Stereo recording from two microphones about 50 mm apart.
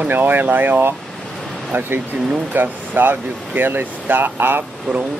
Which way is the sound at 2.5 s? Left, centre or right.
Right.